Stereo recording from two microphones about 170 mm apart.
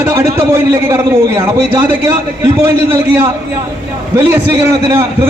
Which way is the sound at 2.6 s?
15° right (ahead or behind).